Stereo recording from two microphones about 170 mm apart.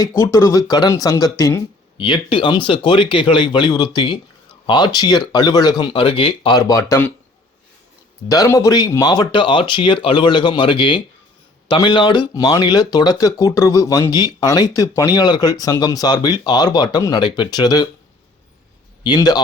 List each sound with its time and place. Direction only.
0.2 s speech: 15° left (ahead or behind)
2.0 s speech: 30° left (ahead or behind)
6.6 s speech: 20° left (ahead or behind)
8.3 s speech: 20° left (ahead or behind)
19.0 s speech: 25° left (ahead or behind)